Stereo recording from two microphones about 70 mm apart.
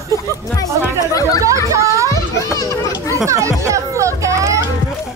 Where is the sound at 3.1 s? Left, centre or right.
Right.